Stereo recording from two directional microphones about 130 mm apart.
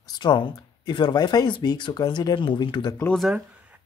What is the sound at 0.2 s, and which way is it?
Speech, 35° left (ahead or behind).